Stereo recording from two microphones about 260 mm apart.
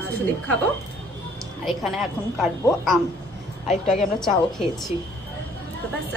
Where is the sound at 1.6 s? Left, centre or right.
Centre.